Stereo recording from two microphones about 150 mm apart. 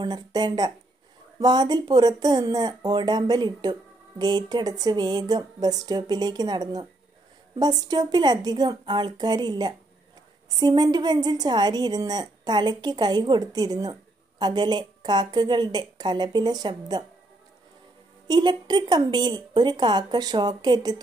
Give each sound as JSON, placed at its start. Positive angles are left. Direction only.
{"t": 0.0, "sound": "a woman's voice", "side_deg": -25}
{"t": 18.2, "sound": "a woman's voice", "side_deg": -30}